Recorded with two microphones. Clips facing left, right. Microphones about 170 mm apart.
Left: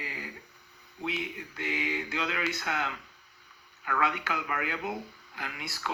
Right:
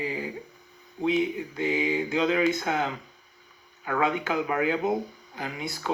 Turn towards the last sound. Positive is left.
turn(degrees=-20)  # may be behind; listen again after turning